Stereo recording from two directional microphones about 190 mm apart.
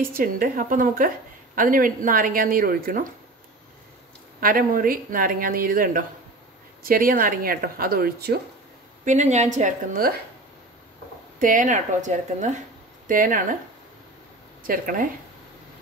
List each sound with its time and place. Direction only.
0.1 s a woman's voice: 50° right (ahead or behind)
4.4 s a woman's voice: 50° right (ahead or behind)
9.0 s a woman's voice: 40° right (ahead or behind)
11.3 s speech: 45° right (ahead or behind)
14.7 s a woman's voice: 45° right (ahead or behind)